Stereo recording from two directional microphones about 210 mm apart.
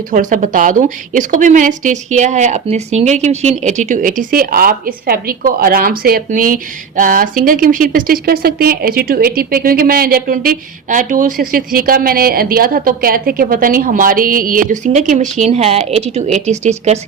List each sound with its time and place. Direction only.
0.1 s a woman's voice: 35° right (ahead or behind)